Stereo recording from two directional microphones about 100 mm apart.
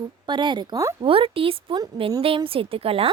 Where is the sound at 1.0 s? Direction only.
65° right (ahead or behind).